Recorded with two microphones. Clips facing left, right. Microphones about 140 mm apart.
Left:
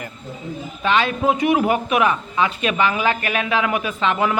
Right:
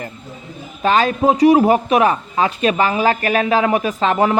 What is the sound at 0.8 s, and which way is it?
Speech, 40° right (ahead or behind).